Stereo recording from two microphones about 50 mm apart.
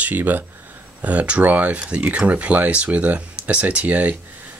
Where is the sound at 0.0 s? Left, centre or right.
Right.